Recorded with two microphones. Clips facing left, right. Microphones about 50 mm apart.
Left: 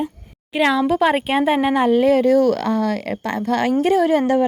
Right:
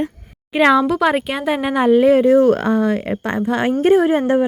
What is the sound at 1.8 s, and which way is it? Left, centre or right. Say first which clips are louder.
Speech: right 6 dB; centre.